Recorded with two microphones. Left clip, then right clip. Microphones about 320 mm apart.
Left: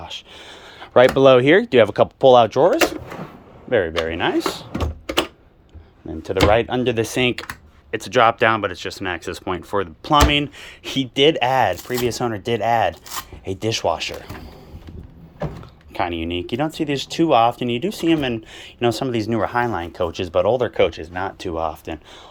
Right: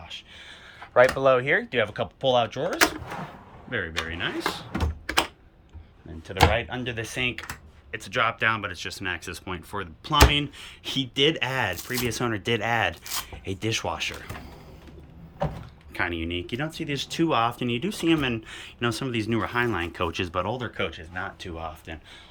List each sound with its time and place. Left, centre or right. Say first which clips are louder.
0.0 s speech: left 7 dB; centre
3.7 s speech: left 10 dB; centre
6.5 s speech: left 10 dB; centre
15.9 s speech: left 5 dB; centre